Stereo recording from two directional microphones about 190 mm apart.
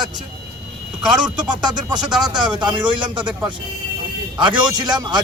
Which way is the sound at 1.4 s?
20° right (ahead or behind).